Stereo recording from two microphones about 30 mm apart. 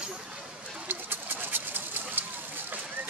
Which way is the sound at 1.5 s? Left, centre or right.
Right.